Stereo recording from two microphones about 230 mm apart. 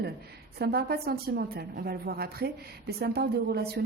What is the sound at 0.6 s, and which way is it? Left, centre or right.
Speech, right.